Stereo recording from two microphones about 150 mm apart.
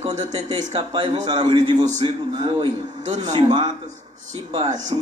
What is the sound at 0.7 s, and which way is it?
A man's voice, 30° right (ahead or behind).